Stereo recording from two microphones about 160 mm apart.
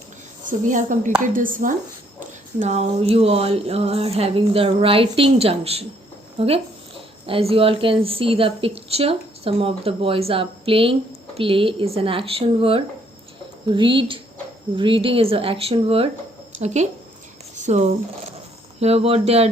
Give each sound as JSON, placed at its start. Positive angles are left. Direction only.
{"t": 0.4, "sound": "a woman's voice", "side_deg": -55}
{"t": 2.2, "sound": "a woman's voice", "side_deg": -50}
{"t": 17.5, "sound": "a sound", "side_deg": -45}
{"t": 18.8, "sound": "a woman's voice", "side_deg": -40}